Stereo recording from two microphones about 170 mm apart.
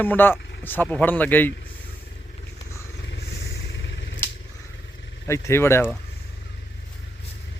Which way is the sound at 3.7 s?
90° left.